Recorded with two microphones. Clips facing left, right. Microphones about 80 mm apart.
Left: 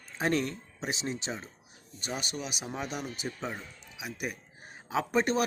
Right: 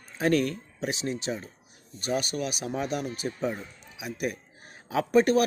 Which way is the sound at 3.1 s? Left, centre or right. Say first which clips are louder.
Right 6 dB; left.